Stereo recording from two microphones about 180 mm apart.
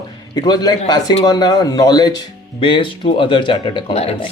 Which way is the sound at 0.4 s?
20° left (ahead or behind).